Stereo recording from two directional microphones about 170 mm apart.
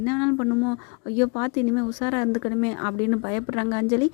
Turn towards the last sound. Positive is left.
turn(degrees=25)  # may be behind; listen again after turning